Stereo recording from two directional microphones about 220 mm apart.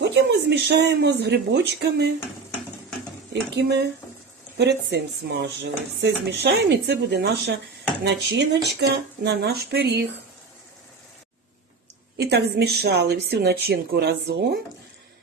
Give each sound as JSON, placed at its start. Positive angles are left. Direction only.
{"t": 0.0, "sound": "speech", "side_deg": -50}
{"t": 3.5, "sound": "speech", "side_deg": -50}
{"t": 12.1, "sound": "speech", "side_deg": -50}